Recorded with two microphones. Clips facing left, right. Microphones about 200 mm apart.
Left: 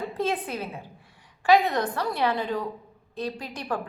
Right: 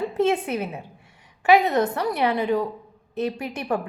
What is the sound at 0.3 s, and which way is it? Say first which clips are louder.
A woman's voice: right 6 dB; 20° right (ahead or behind).